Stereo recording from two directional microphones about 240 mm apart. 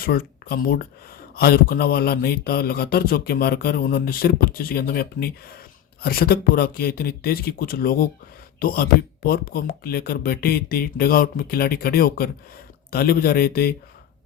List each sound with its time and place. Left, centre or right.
0.0 s speech: left